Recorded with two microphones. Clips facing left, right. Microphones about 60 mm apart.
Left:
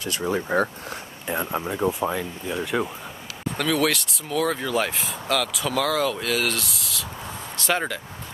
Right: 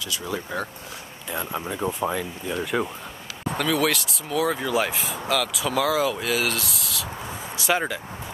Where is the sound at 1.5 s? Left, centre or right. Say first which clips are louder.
Left 3 dB; centre.